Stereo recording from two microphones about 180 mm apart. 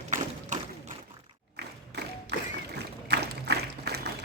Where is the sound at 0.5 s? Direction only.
45° right (ahead or behind).